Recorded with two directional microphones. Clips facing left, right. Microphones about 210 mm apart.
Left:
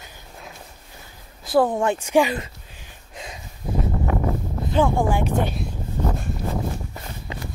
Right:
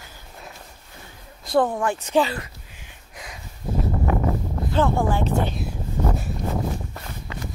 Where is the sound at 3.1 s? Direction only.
25° left (ahead or behind).